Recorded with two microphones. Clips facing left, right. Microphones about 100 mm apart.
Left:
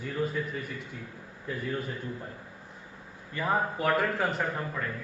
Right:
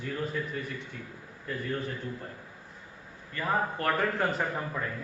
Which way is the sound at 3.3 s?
10° left (ahead or behind).